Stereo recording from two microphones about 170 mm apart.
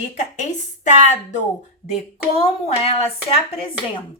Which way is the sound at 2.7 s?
35° left (ahead or behind).